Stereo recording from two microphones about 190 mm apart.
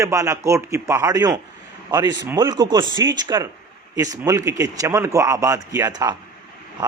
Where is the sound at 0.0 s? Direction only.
15° right (ahead or behind).